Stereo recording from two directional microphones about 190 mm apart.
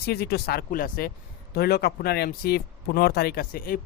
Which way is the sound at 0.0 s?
55° left (ahead or behind).